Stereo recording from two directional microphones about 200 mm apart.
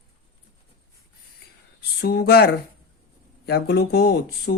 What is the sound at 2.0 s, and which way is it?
Speech, 55° left (ahead or behind).